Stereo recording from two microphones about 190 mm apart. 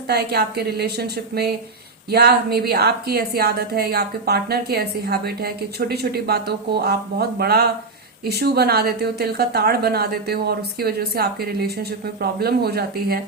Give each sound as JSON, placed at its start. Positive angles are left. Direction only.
{"t": 0.1, "sound": "a woman's voice", "side_deg": -55}